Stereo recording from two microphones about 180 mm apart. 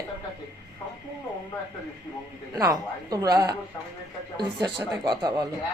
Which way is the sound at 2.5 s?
20° right (ahead or behind).